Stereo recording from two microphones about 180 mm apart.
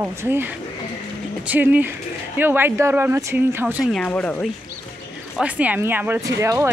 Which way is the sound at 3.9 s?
5° left (ahead or behind).